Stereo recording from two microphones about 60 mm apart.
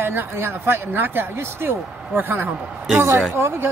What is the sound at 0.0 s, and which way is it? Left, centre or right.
Speech, right.